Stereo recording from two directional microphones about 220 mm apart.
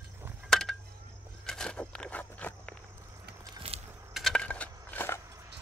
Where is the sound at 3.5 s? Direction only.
25° right (ahead or behind).